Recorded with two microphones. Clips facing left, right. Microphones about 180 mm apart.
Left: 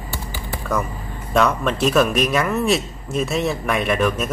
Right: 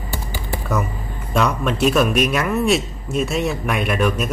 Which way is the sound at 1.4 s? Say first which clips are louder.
Left 1 dB; centre (ahead or behind).